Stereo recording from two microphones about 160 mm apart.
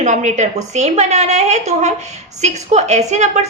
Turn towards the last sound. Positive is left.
turn(degrees=-45)  # may be behind; listen again after turning